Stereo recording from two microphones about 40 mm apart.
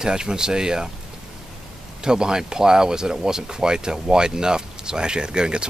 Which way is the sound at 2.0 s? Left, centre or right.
Centre.